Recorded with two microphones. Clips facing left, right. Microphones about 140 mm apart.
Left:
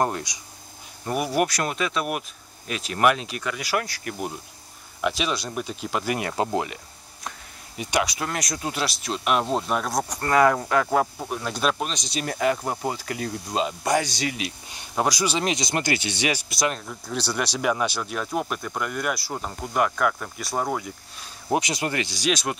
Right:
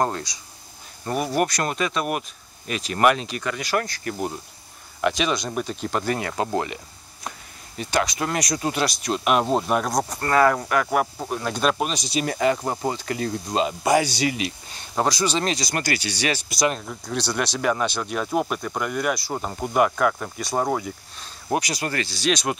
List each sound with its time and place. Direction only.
0.0 s speech: 15° left (ahead or behind)
6.1 s speech: 20° left (ahead or behind)
7.7 s speech: 15° left (ahead or behind)
8.2 s speech: centre (ahead or behind)
10.0 s speech: 15° left (ahead or behind)
11.1 s speech: centre (ahead or behind)
14.7 s speech: 10° left (ahead or behind)
16.4 s speech: centre (ahead or behind)
18.1 s speech: 5° right (ahead or behind)
21.5 s speech: 20° left (ahead or behind)
22.3 s speech: centre (ahead or behind)